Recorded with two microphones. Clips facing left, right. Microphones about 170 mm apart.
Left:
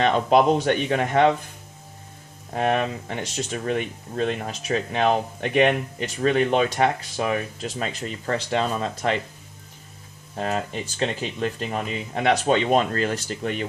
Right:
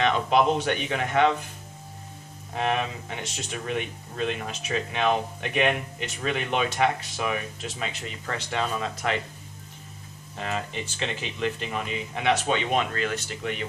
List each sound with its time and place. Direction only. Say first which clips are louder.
0.0 s speech: left 4 dB; 40° left (ahead or behind)
2.6 s speech: left 4 dB; 45° left (ahead or behind)
10.3 s speech: left 5 dB; 40° left (ahead or behind)